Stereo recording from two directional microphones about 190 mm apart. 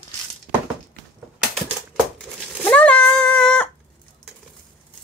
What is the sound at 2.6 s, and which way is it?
Cat, 5° left (ahead or behind).